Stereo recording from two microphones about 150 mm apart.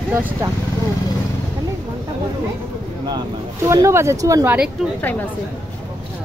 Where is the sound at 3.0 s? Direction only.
25° right (ahead or behind).